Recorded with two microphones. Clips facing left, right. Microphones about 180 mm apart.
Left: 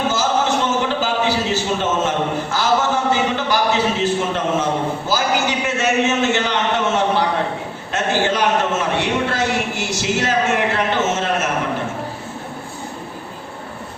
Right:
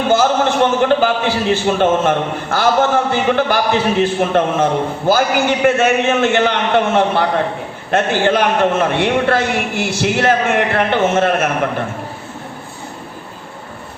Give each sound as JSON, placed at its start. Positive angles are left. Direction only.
{"t": 0.1, "sound": "a man's voice", "side_deg": -55}